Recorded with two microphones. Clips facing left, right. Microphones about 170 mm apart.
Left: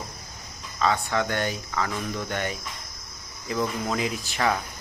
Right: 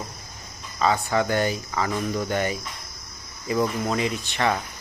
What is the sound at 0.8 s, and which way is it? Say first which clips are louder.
Speech: right 2 dB; 5° right (ahead or behind).